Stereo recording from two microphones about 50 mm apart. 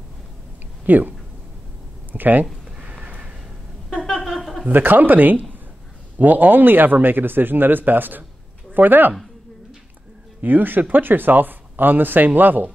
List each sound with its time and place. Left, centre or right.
0.8 s a man's voice: right
2.1 s a man's voice: right
2.8 s neigh: right
3.9 s a sound: centre
4.6 s a man's voice: right
10.4 s a man's voice: right